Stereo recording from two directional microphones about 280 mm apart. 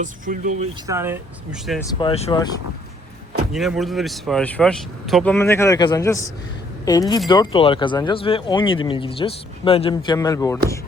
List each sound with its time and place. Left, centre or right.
0.0 s speech: right
0.9 s speech: centre
1.8 s speech: centre
3.5 s speech: centre